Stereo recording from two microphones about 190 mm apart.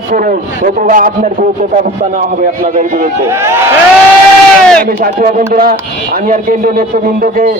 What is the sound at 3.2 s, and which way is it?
Speech, 15° right (ahead or behind).